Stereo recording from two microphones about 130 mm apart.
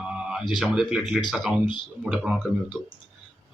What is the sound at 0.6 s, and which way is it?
Speech, 5° right (ahead or behind).